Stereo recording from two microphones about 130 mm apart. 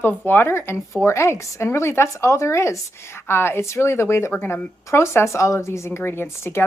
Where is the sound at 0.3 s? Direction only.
20° left (ahead or behind).